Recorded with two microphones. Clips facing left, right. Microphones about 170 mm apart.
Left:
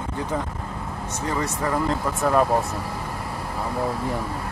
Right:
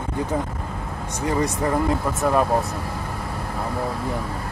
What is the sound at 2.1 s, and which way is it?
Speech, centre (ahead or behind).